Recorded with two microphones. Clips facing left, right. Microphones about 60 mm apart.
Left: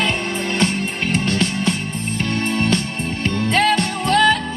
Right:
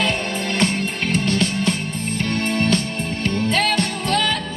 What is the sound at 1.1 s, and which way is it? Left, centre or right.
Music, left.